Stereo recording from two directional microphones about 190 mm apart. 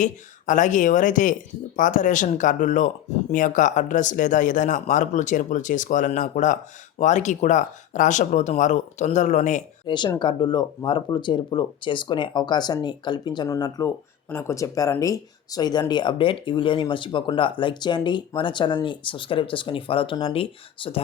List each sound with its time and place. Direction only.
0.0 s speech: 40° left (ahead or behind)
9.8 s speech: 25° left (ahead or behind)